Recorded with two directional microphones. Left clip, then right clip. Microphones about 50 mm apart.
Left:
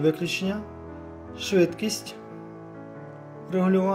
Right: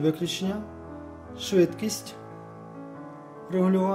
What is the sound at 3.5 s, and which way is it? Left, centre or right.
Speech, right.